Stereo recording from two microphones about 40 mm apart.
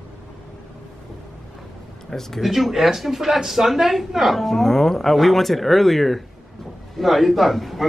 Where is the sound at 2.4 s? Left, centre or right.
Centre.